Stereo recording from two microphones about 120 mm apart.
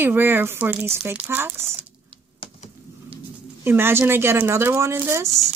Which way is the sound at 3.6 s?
20° right (ahead or behind).